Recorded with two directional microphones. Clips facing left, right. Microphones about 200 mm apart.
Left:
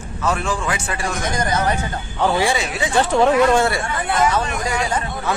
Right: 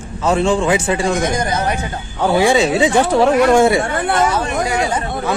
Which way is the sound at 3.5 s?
20° right (ahead or behind).